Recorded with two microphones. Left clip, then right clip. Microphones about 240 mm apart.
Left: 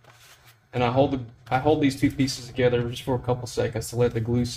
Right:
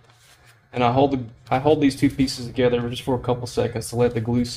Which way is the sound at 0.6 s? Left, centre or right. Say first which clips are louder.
Right 3 dB; right.